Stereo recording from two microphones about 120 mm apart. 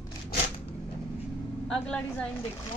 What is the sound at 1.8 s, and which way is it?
Speech, 5° left (ahead or behind).